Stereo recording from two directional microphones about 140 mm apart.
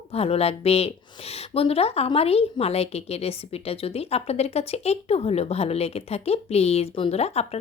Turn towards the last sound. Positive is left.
turn(degrees=50)  # may be behind; listen again after turning